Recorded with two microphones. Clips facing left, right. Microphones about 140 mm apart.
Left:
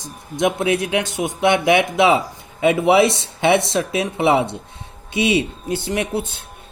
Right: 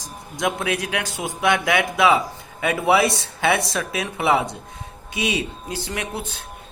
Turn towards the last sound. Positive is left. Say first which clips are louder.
# left 7 dB
turn(degrees=25)  # may be behind; listen again after turning